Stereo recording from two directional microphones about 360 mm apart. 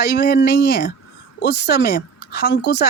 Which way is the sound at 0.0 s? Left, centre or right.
Left.